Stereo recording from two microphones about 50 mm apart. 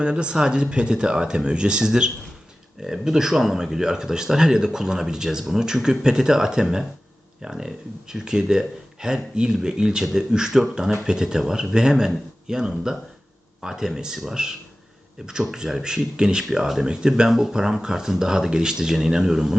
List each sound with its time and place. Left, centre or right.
0.0 s speech: centre